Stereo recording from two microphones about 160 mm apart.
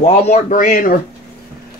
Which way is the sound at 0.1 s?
40° left (ahead or behind).